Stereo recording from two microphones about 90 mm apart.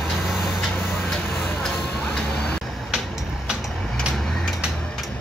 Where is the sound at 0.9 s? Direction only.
25° left (ahead or behind).